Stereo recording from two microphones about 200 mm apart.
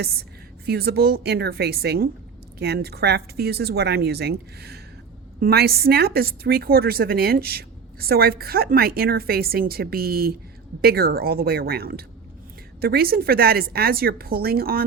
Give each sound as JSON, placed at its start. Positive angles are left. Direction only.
{"t": 0.6, "sound": "a woman's voice", "side_deg": -50}